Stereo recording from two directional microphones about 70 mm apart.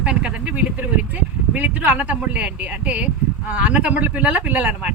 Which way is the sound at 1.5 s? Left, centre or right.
Right.